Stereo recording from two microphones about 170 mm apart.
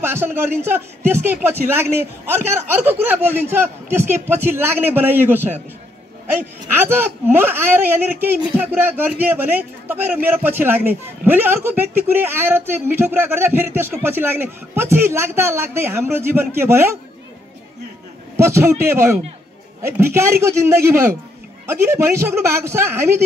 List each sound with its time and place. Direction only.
0.0 s a man's voice: 15° right (ahead or behind)
6.7 s a man's voice: 10° right (ahead or behind)
18.3 s a man's voice: 15° right (ahead or behind)